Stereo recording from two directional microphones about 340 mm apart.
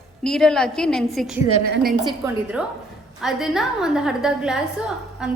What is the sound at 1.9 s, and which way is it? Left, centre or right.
A woman's voice, centre.